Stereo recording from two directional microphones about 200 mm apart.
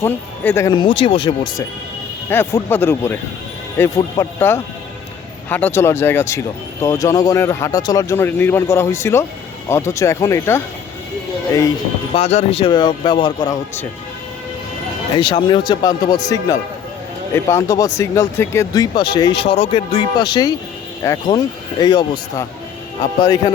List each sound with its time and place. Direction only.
0.0 s speech: 15° left (ahead or behind)
2.3 s speech: 10° left (ahead or behind)
12.1 s speech: 30° left (ahead or behind)
15.2 s speech: 25° left (ahead or behind)